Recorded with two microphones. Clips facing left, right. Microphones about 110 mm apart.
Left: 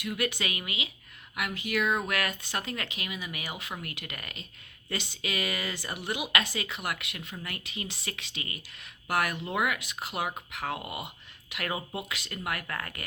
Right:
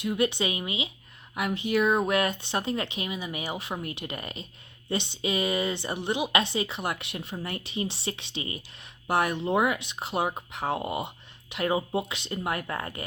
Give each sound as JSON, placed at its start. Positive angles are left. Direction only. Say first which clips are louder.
{"t": 0.0, "sound": "speech", "louder": "right 6 dB", "side_deg": -30}